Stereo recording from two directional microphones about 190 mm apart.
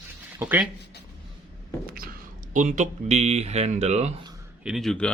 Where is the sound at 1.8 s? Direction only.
50° right (ahead or behind).